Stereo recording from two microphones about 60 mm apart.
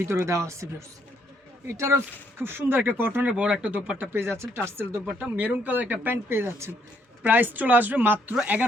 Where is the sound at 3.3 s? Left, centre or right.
Centre.